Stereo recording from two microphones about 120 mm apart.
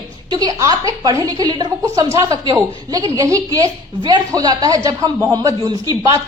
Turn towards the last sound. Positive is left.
turn(degrees=-30)  # may be behind; listen again after turning